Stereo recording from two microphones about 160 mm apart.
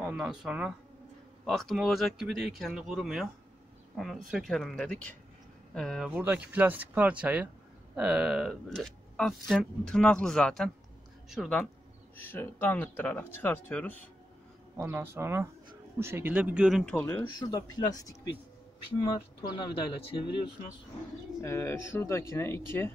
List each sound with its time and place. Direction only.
0.0 s speech: 5° right (ahead or behind)
12.2 s speech: 15° left (ahead or behind)
14.8 s speech: 15° right (ahead or behind)
16.9 s speech: 15° left (ahead or behind); by 20.4 s 35° left (ahead or behind)
21.4 s speech: 15° left (ahead or behind)